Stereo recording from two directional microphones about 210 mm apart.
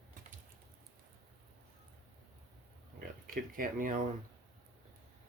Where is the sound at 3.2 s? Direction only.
40° right (ahead or behind).